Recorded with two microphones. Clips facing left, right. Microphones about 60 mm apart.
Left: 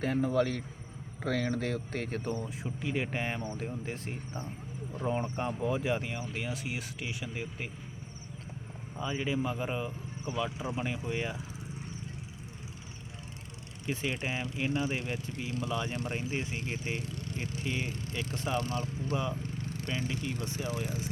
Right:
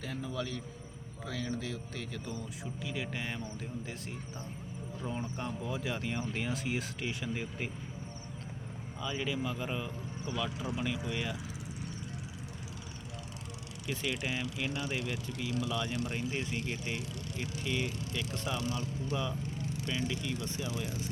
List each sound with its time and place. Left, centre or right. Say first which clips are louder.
0.0 s speech: left 10 dB; left
2.4 s speech: left 4 dB; left
6.1 s speech: right 1 dB; centre
9.0 s speech: left 3 dB; left
13.8 s speech: left 2 dB; left
18.5 s speech: left 4 dB; left
19.1 s speech: left 3 dB; left
19.4 s speech: even; left